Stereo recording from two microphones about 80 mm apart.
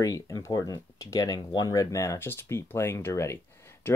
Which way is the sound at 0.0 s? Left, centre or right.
Left.